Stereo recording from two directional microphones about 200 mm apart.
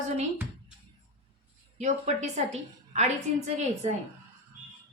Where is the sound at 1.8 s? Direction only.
35° right (ahead or behind).